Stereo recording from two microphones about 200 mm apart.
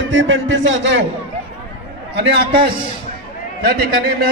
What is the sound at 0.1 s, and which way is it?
Speech, 70° right (ahead or behind).